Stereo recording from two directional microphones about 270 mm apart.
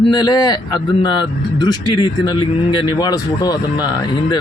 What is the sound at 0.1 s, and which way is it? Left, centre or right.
Speech, centre.